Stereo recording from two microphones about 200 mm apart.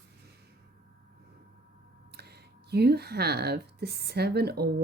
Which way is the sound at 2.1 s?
55° right (ahead or behind).